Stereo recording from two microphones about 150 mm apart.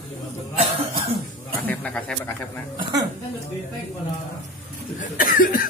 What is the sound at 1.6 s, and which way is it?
Speech, 5° left (ahead or behind).